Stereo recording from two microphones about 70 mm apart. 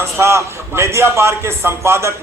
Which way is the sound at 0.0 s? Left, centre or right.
Right.